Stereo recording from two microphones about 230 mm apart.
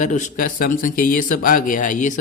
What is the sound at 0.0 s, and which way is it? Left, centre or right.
Speech, left.